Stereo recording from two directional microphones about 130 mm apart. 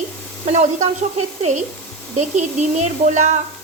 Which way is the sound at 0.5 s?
60° right (ahead or behind).